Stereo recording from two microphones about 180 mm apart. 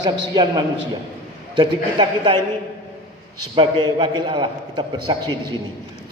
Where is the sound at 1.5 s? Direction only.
25° right (ahead or behind).